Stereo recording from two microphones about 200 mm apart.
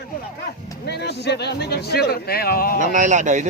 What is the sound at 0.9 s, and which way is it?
Speech, 55° left (ahead or behind).